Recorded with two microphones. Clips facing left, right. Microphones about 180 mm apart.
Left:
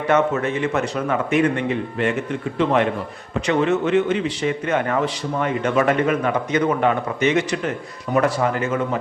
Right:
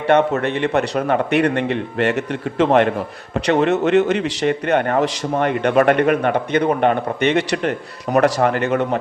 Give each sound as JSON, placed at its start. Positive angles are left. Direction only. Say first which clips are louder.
{"t": 0.1, "sound": "a man's voice", "louder": "right 3 dB", "side_deg": -60}